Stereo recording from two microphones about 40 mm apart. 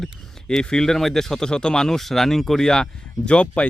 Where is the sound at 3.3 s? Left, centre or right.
Left.